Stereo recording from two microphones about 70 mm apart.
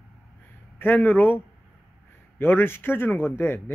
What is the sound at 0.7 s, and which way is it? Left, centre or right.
A man's voice, left.